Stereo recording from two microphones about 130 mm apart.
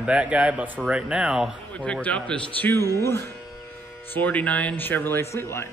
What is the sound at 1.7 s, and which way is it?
A man's voice, 10° left (ahead or behind).